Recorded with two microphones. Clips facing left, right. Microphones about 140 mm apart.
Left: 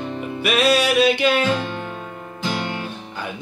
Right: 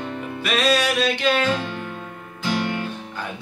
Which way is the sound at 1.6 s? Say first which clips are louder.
Left 2 dB; 20° left (ahead or behind).